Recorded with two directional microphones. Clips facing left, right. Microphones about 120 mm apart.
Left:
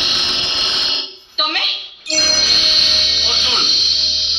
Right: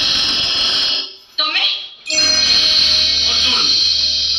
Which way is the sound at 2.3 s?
35° left (ahead or behind).